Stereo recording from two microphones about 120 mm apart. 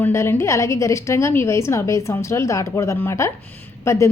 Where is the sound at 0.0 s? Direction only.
20° left (ahead or behind).